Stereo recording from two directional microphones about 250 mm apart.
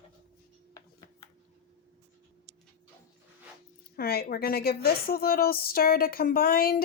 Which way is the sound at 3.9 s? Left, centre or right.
Left.